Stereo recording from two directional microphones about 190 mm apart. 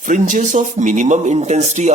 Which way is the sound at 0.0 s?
40° right (ahead or behind).